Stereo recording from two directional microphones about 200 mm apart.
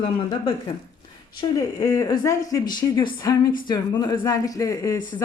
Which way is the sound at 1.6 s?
15° left (ahead or behind).